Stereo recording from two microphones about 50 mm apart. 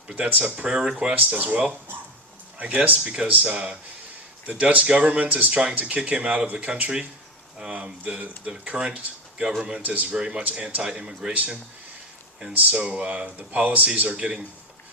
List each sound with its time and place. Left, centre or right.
0.2 s speech: right
1.1 s speech: right
10.2 s speech: centre
12.7 s speech: right